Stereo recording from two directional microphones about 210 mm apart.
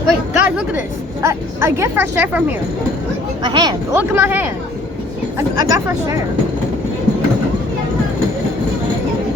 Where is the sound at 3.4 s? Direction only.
20° right (ahead or behind).